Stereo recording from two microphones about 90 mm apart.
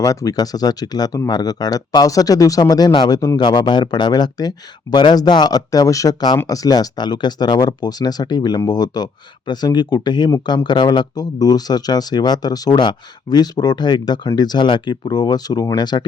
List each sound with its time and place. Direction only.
0.0 s speech: 40° left (ahead or behind)